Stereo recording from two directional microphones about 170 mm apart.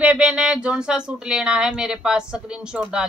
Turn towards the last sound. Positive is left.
turn(degrees=-5)  # may be behind; listen again after turning